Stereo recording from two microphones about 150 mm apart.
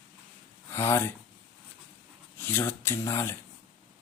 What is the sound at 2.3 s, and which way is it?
Speech, 15° left (ahead or behind).